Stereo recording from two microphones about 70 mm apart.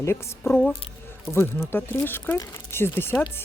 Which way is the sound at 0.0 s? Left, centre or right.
Left.